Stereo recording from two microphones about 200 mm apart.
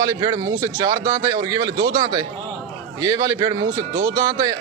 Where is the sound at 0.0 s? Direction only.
20° right (ahead or behind).